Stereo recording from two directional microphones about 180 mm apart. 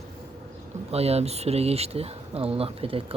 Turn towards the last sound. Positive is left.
turn(degrees=-30)  # may be behind; listen again after turning